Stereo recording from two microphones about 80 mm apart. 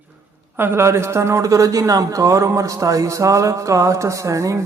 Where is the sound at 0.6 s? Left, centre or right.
Right.